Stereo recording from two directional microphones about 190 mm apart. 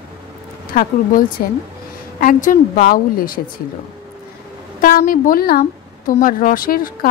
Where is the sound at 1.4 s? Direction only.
45° left (ahead or behind).